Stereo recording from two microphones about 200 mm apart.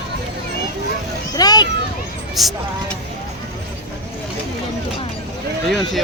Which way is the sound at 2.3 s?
Centre (ahead or behind).